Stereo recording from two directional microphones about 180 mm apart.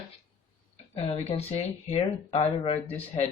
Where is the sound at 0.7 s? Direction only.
35° left (ahead or behind).